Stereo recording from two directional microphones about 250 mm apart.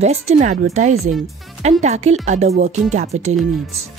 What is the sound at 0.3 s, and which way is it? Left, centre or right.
Speech, right.